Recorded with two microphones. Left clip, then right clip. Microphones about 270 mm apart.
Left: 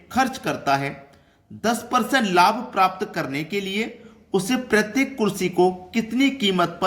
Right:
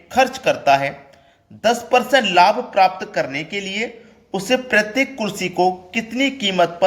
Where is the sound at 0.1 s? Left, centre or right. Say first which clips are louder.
Right 6 dB; centre.